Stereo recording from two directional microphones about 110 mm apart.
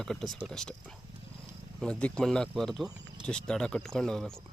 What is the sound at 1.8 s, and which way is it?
Speech, 10° left (ahead or behind).